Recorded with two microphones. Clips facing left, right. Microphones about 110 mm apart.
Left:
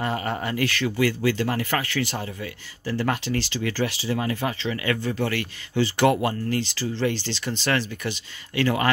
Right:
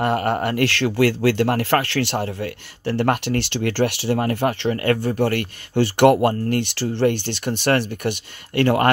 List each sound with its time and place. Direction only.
0.0 s speech: 60° right (ahead or behind)